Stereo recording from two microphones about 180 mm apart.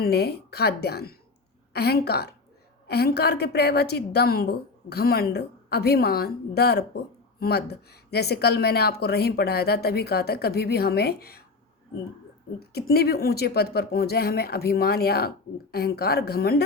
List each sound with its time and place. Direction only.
0.0 s a woman's voice: 65° left (ahead or behind)
12.5 s a woman's voice: 60° left (ahead or behind)